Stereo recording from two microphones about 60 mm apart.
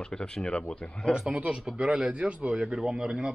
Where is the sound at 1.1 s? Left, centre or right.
Centre.